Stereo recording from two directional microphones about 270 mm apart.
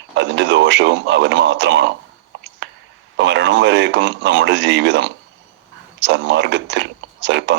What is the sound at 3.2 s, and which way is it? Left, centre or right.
Speech, right.